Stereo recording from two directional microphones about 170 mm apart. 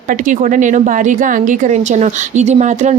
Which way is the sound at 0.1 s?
50° right (ahead or behind).